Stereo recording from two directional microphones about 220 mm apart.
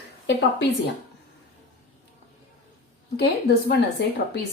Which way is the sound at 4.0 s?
50° left (ahead or behind).